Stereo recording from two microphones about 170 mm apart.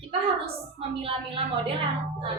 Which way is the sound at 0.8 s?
30° right (ahead or behind).